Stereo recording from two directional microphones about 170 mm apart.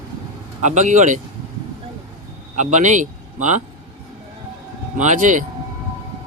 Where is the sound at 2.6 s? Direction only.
45° right (ahead or behind).